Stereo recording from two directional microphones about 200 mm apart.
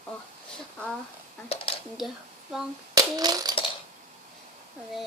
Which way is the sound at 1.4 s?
30° left (ahead or behind).